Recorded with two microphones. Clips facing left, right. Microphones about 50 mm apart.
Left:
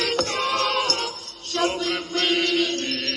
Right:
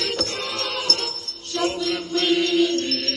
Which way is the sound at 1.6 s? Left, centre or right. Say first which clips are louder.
Even; left.